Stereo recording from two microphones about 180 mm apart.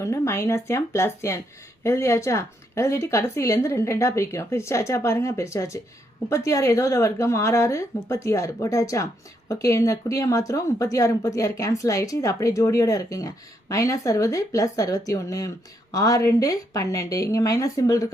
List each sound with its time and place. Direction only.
0.0 s speech: 15° left (ahead or behind)